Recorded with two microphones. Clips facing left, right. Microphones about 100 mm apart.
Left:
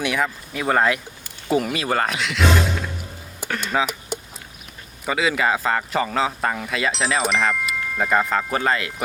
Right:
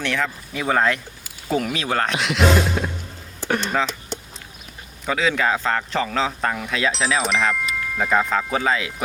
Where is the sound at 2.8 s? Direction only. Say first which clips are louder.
Right 5 dB; 35° right (ahead or behind).